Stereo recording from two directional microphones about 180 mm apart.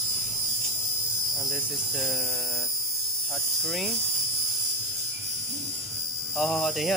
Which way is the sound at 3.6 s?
5° left (ahead or behind).